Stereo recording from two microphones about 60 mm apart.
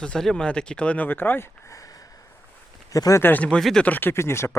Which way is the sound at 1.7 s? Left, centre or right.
Left.